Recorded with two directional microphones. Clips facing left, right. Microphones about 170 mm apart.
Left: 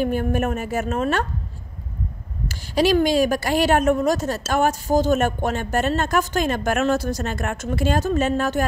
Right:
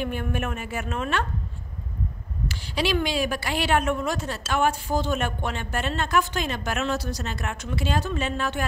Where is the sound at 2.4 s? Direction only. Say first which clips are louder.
Left 7 dB; 45° left (ahead or behind).